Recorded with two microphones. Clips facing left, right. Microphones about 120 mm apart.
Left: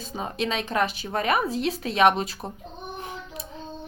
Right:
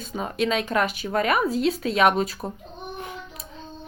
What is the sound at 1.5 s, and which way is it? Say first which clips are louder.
Speech: right 4 dB; 40° right (ahead or behind).